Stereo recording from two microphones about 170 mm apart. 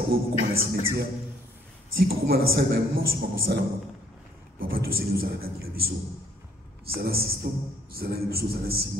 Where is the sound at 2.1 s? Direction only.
65° right (ahead or behind).